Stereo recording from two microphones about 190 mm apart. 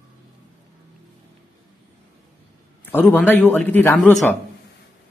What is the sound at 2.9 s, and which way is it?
A man's voice, 10° left (ahead or behind).